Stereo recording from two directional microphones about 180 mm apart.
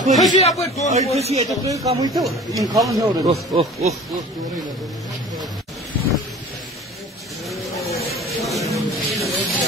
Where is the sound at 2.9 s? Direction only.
20° right (ahead or behind).